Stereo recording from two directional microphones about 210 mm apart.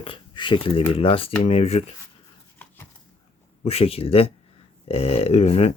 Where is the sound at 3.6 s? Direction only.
30° left (ahead or behind).